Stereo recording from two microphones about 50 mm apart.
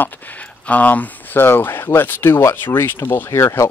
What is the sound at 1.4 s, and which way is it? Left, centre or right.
Speech, left.